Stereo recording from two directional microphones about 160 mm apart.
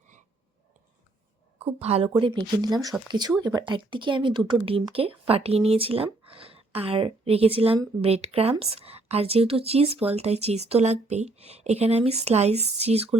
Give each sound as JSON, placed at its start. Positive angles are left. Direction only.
{"t": 1.5, "sound": "a woman's voice", "side_deg": -40}